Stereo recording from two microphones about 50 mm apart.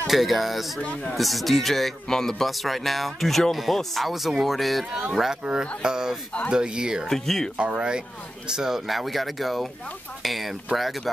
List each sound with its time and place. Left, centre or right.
0.0 s speech: centre
5.4 s speech: centre
7.1 s speech: centre
7.5 s speech: right
8.5 s speech: centre